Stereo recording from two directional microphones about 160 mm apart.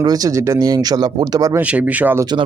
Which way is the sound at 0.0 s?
25° right (ahead or behind).